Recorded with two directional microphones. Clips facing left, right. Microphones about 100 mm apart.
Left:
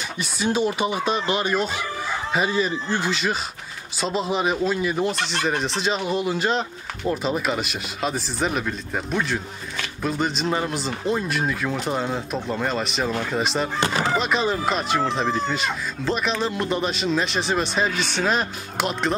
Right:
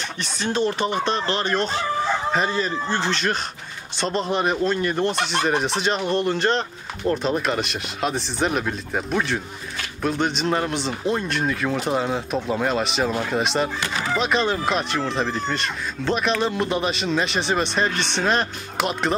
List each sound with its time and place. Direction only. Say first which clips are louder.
0.2 s speech: left 1 dB; 10° left (ahead or behind)
13.7 s speech: left 4 dB; 30° left (ahead or behind)
14.1 s speech: right 1 dB; centre (ahead or behind)